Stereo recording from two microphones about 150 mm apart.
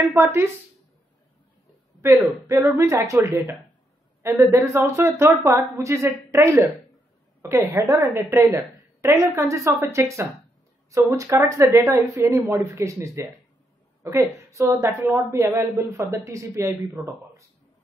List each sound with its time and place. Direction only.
0.1 s speech: 15° right (ahead or behind)
2.4 s a woman's voice: 20° right (ahead or behind)